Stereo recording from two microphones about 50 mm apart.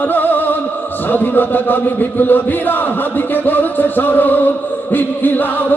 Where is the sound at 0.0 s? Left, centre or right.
Left.